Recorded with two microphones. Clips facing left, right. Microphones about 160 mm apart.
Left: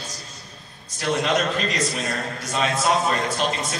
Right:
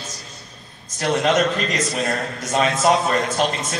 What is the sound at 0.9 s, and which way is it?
A man's voice, 45° right (ahead or behind).